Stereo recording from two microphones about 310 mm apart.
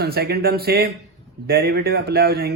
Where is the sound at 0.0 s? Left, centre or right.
Right.